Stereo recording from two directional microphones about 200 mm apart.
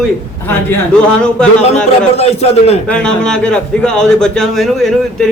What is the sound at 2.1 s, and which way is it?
Speech, 30° left (ahead or behind).